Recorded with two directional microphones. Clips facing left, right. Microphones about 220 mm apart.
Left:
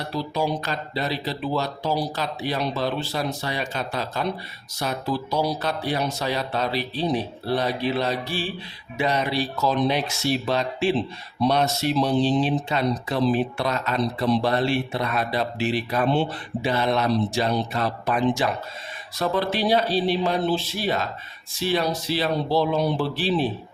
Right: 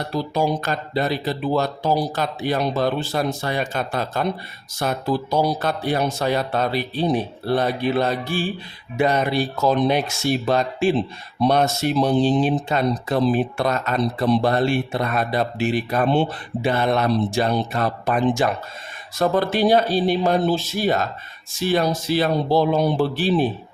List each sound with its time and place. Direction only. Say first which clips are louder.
0.1 s speech: right 3 dB; 45° right (ahead or behind)